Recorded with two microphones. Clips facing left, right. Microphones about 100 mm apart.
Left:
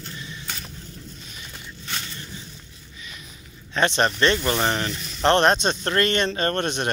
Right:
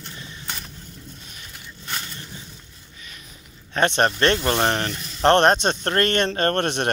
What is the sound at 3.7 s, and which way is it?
Speech, 50° right (ahead or behind).